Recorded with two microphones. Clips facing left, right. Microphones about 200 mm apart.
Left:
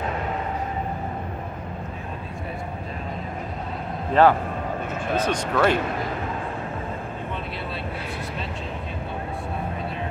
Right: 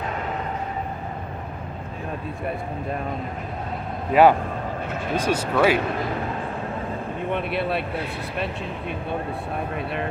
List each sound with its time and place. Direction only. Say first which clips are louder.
4.1 s speech: right 2 dB; 10° right (ahead or behind)
7.3 s speech: right 7 dB; 65° right (ahead or behind)